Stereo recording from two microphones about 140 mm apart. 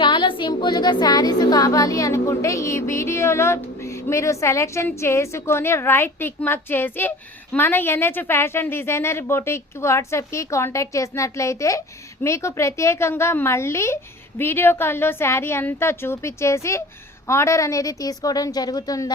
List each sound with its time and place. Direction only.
0.0 s a woman's voice: 35° left (ahead or behind)